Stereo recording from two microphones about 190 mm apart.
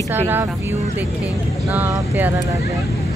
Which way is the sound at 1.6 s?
10° right (ahead or behind).